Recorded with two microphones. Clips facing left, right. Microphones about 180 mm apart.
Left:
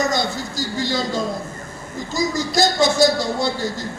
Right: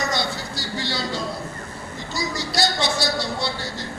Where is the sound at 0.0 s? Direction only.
45° left (ahead or behind).